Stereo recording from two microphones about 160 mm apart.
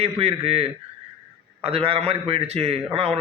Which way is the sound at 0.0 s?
40° right (ahead or behind).